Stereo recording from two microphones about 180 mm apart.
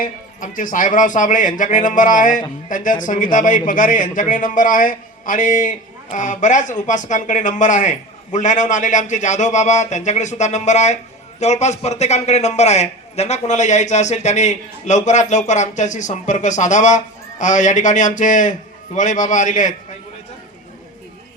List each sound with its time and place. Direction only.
0.0 s a man's voice: 50° left (ahead or behind)